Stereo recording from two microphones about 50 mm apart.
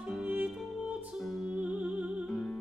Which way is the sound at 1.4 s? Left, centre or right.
Right.